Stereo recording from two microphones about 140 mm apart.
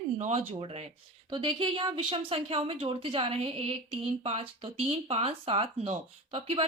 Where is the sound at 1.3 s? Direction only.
35° right (ahead or behind).